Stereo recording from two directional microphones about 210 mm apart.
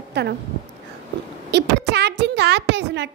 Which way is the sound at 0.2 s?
55° right (ahead or behind).